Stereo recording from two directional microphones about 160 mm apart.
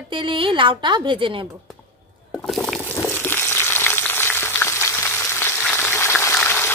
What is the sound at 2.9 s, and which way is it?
Frying, 15° left (ahead or behind).